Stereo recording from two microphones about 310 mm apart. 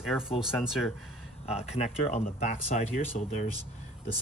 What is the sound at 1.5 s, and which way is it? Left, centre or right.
Speech, centre.